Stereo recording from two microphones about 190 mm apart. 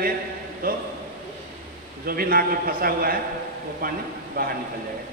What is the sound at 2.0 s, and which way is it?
A man's voice, 50° right (ahead or behind).